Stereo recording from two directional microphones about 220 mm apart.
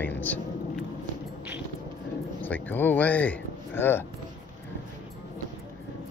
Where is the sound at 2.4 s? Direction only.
10° left (ahead or behind).